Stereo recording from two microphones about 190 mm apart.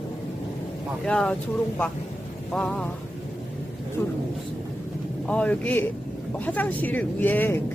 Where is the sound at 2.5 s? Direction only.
5° left (ahead or behind).